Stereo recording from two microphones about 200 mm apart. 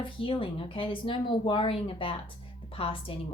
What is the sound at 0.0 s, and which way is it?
Speech, 25° left (ahead or behind).